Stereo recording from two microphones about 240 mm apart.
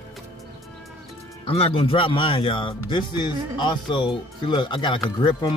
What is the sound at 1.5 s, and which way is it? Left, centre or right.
Speech, left.